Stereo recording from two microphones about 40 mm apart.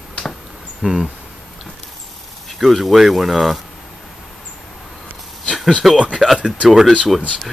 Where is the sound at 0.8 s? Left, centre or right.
Centre.